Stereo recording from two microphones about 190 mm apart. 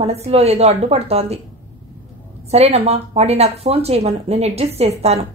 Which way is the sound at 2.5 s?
35° right (ahead or behind).